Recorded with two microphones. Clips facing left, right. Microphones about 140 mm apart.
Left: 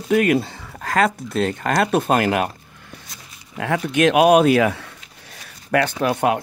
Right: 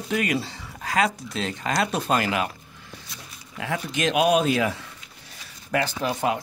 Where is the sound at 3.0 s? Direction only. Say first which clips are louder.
Even; 55° left (ahead or behind).